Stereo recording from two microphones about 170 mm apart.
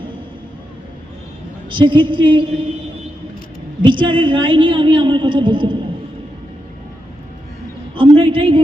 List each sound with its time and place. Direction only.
1.7 s a woman's voice: 30° right (ahead or behind)
3.8 s a woman's voice: 30° right (ahead or behind)
7.9 s a sound: 30° right (ahead or behind)